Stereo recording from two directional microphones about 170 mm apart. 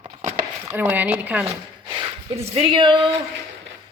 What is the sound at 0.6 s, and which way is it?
Speech, 10° right (ahead or behind).